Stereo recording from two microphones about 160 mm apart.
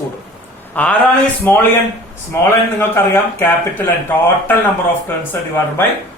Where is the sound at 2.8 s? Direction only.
15° left (ahead or behind).